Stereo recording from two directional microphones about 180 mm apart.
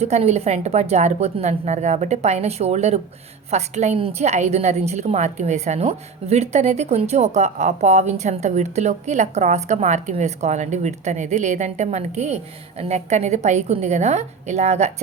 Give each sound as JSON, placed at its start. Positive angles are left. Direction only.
{"t": 0.0, "sound": "a woman's voice", "side_deg": -35}